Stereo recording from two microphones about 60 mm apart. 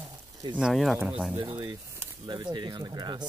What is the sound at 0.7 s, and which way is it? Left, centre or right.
Speech, centre.